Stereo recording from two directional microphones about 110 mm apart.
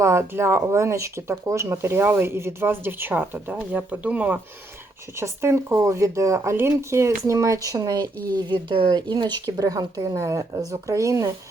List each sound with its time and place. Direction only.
0.0 s speech: 25° right (ahead or behind)
5.1 s speech: 25° right (ahead or behind)
8.4 s speech: 50° right (ahead or behind); by 11.3 s 30° right (ahead or behind)